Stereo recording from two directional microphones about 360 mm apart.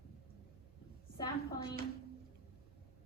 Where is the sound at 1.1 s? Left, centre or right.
Centre.